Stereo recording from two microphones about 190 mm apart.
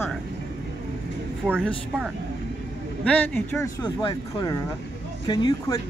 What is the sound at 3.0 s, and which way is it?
Speech, 5° left (ahead or behind).